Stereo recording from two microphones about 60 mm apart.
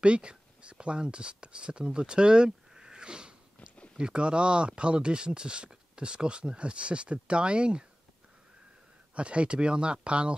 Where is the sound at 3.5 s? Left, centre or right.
Left.